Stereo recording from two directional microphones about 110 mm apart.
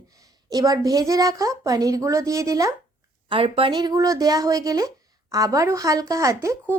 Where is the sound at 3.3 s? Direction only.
55° right (ahead or behind).